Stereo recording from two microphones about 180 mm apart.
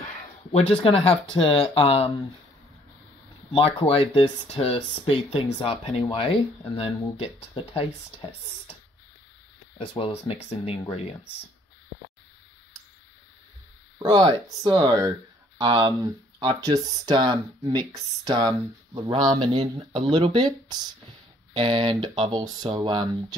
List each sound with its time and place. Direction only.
0.5 s speech: 30° left (ahead or behind)
3.5 s speech: 30° left (ahead or behind)
9.8 s speech: 30° left (ahead or behind)
14.0 s speech: 25° right (ahead or behind)